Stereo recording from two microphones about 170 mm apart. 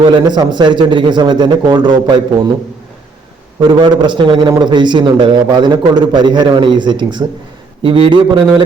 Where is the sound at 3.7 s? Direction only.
30° right (ahead or behind).